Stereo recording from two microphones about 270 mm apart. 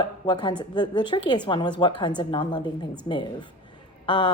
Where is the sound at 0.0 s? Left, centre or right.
Centre.